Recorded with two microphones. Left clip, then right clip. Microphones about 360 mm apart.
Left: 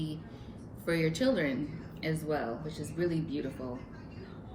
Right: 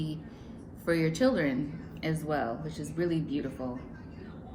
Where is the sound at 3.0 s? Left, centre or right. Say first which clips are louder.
Right 2 dB; centre.